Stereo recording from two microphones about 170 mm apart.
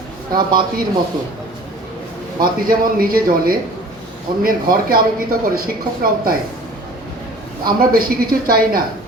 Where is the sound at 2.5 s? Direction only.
55° right (ahead or behind).